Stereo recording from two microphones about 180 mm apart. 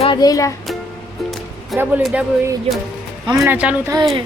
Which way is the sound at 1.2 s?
Centre (ahead or behind).